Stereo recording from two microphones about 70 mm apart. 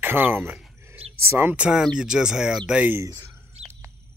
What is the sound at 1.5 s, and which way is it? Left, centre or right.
Speech, centre.